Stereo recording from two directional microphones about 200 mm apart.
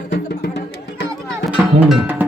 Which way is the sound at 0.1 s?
55° left (ahead or behind).